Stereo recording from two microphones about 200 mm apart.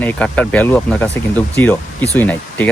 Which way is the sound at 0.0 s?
10° left (ahead or behind).